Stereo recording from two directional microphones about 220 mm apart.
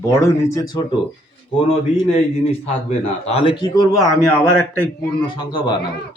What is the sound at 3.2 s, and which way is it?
Speech, 25° left (ahead or behind).